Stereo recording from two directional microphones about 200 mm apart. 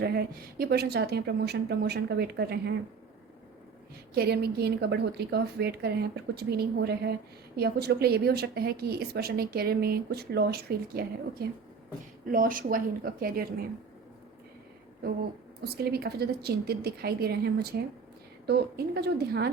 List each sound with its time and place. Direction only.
0.0 s a woman's voice: 50° right (ahead or behind)
4.1 s a woman's voice: 50° right (ahead or behind)
15.6 s a woman's voice: 50° right (ahead or behind)